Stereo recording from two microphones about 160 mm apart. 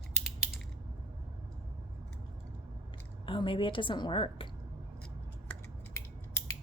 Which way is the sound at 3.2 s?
30° left (ahead or behind).